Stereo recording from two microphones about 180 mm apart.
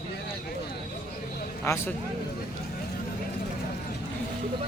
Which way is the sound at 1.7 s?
15° left (ahead or behind).